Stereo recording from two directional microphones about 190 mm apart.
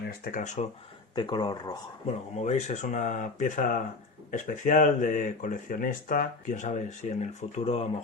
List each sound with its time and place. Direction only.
0.1 s speech: 45° left (ahead or behind)
1.1 s speech: 25° left (ahead or behind)
2.3 s speech: 40° left (ahead or behind)